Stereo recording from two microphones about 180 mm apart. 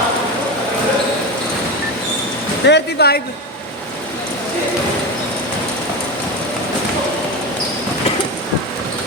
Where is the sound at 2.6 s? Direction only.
65° left (ahead or behind).